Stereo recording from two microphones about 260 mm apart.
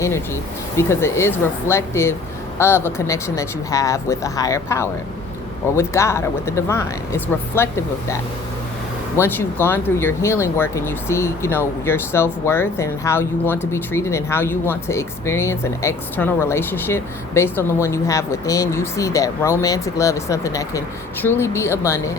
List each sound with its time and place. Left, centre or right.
0.8 s speech: centre